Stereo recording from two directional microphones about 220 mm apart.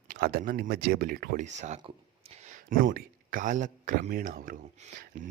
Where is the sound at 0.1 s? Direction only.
45° right (ahead or behind).